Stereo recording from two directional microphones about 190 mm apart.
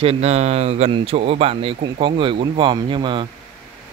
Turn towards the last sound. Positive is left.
turn(degrees=-25)  # may be behind; listen again after turning